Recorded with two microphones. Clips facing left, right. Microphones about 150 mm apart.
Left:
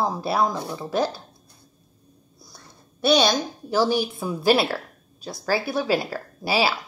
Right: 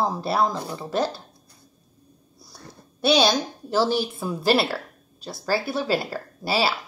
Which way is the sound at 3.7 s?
15° left (ahead or behind).